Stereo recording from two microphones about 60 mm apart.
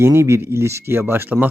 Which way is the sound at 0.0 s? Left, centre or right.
Right.